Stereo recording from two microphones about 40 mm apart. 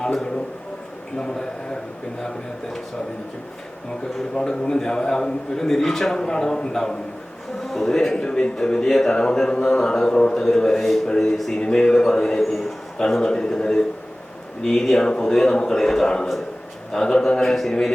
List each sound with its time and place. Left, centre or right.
0.0 s a sound: centre
1.1 s a man's voice: centre
4.4 s a man's voice: centre
10.8 s a man's voice: centre
11.6 s a man's voice: centre
12.4 s a man's voice: centre
13.0 s a man's voice: centre
17.5 s a man's voice: centre